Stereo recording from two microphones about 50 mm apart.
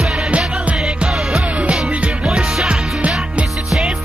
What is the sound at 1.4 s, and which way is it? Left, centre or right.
Music, centre.